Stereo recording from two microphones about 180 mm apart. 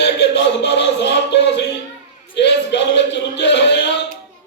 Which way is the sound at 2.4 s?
75° left (ahead or behind).